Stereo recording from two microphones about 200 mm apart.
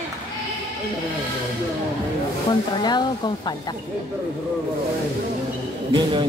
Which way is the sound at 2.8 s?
20° left (ahead or behind).